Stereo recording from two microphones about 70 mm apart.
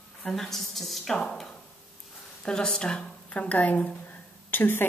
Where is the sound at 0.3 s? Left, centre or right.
Centre.